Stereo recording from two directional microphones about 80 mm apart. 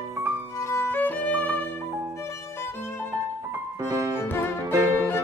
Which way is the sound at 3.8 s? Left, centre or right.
Right.